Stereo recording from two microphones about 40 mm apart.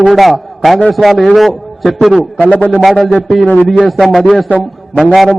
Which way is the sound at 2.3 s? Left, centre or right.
Left.